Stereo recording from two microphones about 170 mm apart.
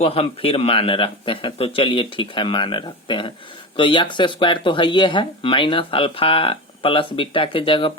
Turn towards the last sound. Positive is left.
turn(degrees=30)  # may be behind; listen again after turning